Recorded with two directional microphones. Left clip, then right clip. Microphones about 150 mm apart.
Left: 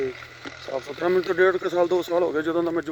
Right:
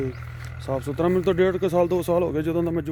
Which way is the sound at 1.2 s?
15° right (ahead or behind).